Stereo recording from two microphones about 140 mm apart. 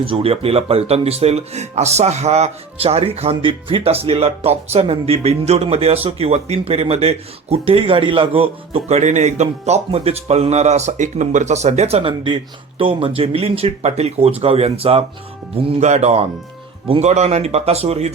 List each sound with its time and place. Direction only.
0.0 s speech: 40° right (ahead or behind)